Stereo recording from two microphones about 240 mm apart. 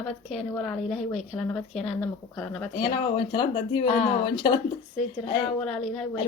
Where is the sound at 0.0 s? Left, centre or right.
Centre.